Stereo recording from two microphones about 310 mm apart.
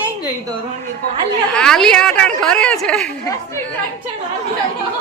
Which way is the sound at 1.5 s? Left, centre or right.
Centre.